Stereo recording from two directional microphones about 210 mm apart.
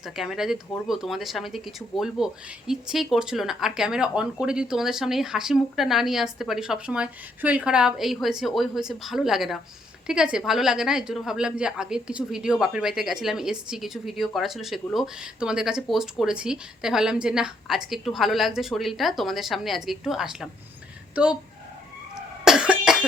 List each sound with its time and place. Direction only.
0.0 s a woman's voice: centre (ahead or behind)
22.1 s cough: 5° right (ahead or behind)